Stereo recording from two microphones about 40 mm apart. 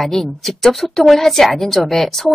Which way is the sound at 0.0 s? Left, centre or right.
Centre.